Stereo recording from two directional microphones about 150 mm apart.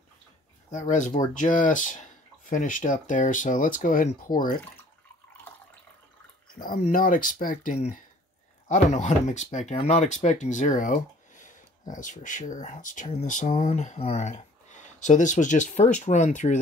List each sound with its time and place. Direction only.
0.7 s speech: 55° left (ahead or behind); by 4.6 s 75° left (ahead or behind)
6.8 s speech: 65° left (ahead or behind)
8.6 s speech: 55° left (ahead or behind)